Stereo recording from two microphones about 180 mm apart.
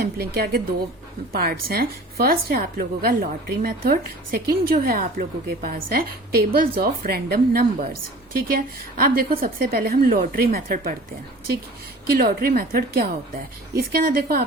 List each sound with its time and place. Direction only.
0.3 s a woman's voice: 60° right (ahead or behind)
12.0 s a woman's voice: 55° right (ahead or behind)